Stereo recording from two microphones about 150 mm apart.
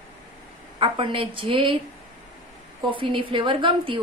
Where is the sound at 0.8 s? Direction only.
35° right (ahead or behind).